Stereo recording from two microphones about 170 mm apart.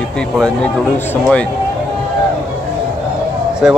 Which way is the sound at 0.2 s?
5° left (ahead or behind).